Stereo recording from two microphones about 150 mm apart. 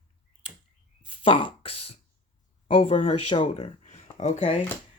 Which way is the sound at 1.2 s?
35° left (ahead or behind).